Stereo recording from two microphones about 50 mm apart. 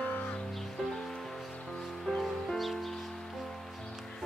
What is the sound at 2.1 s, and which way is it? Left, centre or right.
Music, centre.